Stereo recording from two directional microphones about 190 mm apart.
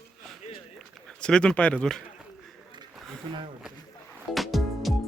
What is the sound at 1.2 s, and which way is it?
Speech, 5° left (ahead or behind).